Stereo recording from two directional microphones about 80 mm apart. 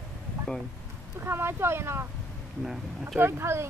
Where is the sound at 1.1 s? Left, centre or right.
Right.